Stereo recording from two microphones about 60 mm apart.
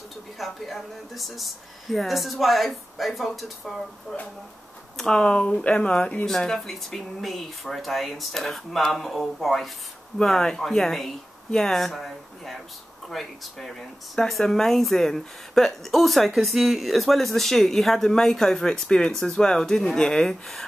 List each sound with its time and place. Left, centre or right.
0.4 s speech: centre
4.1 s speech: centre
6.2 s speech: centre